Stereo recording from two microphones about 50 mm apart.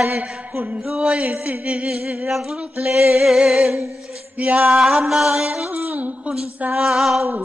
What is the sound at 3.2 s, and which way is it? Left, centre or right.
Music, centre.